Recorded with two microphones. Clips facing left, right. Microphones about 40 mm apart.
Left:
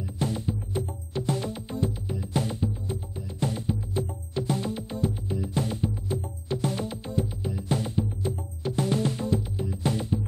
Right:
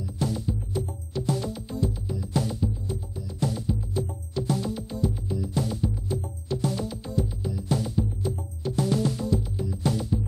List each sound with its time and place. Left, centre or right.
0.0 s music: left